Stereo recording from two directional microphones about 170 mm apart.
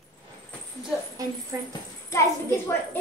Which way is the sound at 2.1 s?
15° left (ahead or behind).